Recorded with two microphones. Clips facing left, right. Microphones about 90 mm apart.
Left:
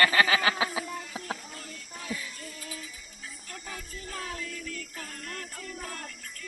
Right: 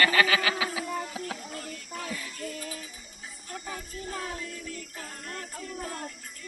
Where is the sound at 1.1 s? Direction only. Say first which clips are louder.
Right 1 dB; 35° left (ahead or behind).